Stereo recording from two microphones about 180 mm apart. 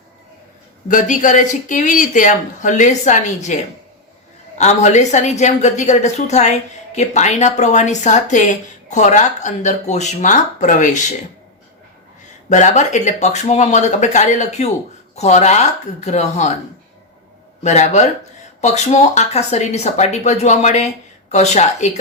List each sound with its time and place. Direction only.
0.9 s a woman's voice: 45° left (ahead or behind)
12.5 s a woman's voice: 40° left (ahead or behind)
17.6 s a woman's voice: 40° left (ahead or behind)